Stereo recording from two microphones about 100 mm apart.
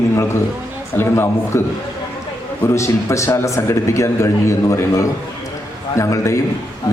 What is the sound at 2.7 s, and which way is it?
A man's voice, 30° left (ahead or behind).